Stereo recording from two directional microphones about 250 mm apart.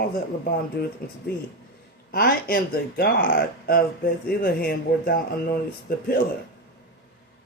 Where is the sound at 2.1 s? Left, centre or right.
Left.